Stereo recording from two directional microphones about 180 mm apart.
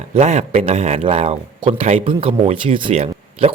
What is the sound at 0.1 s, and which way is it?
Speech, 40° right (ahead or behind).